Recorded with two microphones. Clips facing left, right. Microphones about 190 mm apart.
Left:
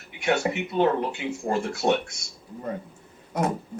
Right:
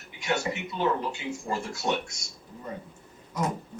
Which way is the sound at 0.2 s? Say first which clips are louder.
Left 5 dB; 55° left (ahead or behind).